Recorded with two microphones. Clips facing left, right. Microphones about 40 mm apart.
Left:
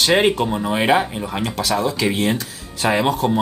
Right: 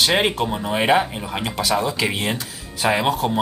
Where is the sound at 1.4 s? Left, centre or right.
Centre.